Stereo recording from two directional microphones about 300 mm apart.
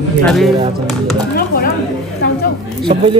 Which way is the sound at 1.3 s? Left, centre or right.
Left.